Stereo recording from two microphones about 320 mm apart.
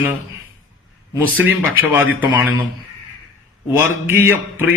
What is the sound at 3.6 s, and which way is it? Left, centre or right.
A man's voice, centre.